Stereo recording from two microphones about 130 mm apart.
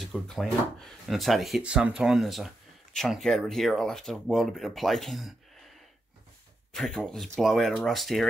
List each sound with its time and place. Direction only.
0.0 s speech: centre (ahead or behind)
6.7 s speech: centre (ahead or behind)